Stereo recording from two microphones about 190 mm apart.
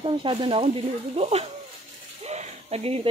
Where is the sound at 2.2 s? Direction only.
35° right (ahead or behind).